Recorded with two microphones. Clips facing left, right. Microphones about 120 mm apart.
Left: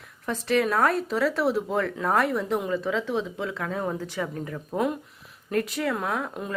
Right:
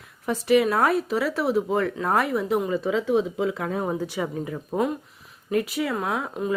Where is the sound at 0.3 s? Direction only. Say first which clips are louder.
Right 4 dB; 10° right (ahead or behind).